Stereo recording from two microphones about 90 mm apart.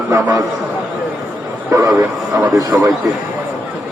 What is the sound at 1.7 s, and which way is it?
A man's voice, 40° right (ahead or behind).